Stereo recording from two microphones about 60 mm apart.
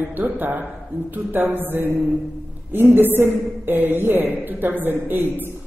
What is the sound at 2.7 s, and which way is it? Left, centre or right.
A woman's voice, right.